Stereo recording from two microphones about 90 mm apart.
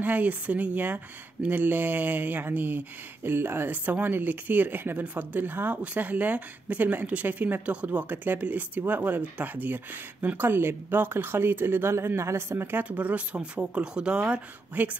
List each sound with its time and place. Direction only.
0.0 s speech: 20° right (ahead or behind)